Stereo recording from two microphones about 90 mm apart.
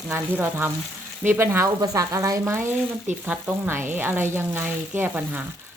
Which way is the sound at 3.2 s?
20° right (ahead or behind).